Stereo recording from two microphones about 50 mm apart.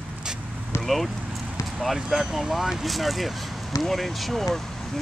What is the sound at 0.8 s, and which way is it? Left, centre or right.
Speech, centre.